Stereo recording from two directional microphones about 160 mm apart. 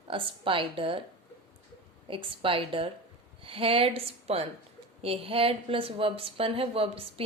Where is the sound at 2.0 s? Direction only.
35° right (ahead or behind).